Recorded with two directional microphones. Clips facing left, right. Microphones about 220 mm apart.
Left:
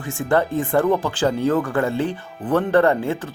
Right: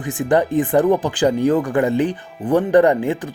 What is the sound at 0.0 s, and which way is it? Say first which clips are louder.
Speech: right 3 dB; 15° right (ahead or behind).